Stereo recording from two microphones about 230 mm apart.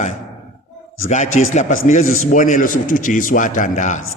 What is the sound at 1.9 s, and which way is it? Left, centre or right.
A man's voice, left.